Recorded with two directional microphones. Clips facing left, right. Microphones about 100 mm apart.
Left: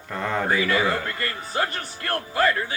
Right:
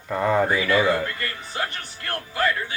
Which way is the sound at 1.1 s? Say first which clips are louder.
Left 3 dB; 30° left (ahead or behind).